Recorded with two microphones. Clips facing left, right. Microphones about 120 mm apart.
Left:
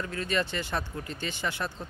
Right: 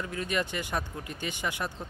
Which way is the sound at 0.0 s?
15° right (ahead or behind).